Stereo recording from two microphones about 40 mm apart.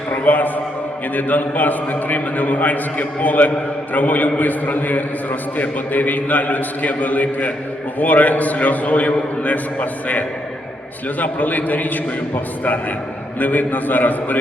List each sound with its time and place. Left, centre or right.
0.1 s a man's voice: left
13.4 s a man's voice: left